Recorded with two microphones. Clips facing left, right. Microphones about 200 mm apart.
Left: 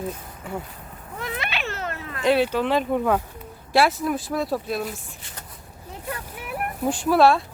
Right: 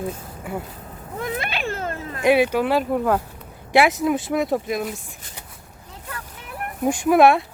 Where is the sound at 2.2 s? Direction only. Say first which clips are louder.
Right 3 dB; 10° right (ahead or behind).